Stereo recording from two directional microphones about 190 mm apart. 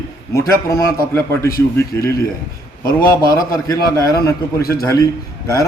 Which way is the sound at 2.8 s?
50° left (ahead or behind).